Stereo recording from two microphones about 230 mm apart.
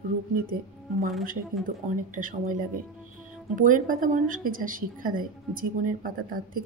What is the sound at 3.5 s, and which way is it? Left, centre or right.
A woman's voice, right.